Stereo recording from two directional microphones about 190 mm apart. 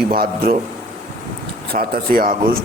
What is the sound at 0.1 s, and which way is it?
Speech, 50° right (ahead or behind).